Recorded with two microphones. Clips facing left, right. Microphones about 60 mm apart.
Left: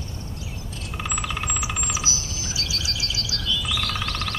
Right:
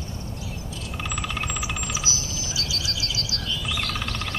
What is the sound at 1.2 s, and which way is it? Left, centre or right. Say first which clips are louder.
Vehicle: left 1 dB; centre.